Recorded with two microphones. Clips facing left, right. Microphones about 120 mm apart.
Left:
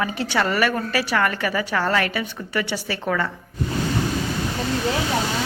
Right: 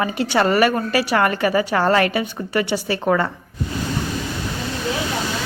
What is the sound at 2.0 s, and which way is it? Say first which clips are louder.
Speech: right 5 dB; 20° right (ahead or behind).